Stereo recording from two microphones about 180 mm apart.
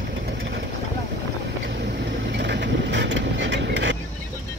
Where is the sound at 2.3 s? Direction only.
70° right (ahead or behind).